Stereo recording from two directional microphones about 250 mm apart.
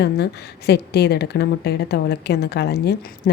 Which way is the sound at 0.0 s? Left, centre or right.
Left.